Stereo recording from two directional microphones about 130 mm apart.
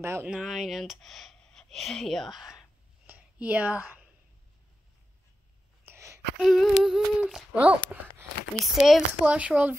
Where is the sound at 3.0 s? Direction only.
10° right (ahead or behind).